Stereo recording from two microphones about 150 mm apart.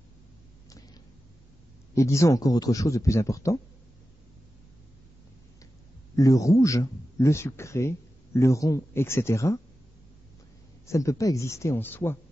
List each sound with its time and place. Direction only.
2.0 s a man's voice: 20° left (ahead or behind)
6.1 s a man's voice: 20° left (ahead or behind)
10.9 s a man's voice: 20° left (ahead or behind)